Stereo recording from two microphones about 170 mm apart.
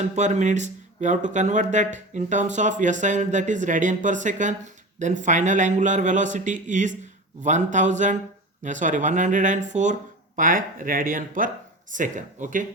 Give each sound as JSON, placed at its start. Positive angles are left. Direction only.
{"t": 0.0, "sound": "speech", "side_deg": -45}